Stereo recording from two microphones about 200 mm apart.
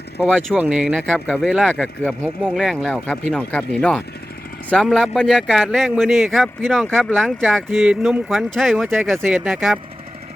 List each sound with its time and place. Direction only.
0.2 s a man's voice: 5° right (ahead or behind)